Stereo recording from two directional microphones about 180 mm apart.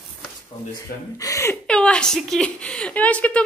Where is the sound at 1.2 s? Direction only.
15° left (ahead or behind).